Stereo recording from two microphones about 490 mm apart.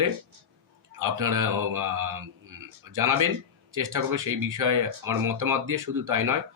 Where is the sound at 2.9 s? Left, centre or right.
Right.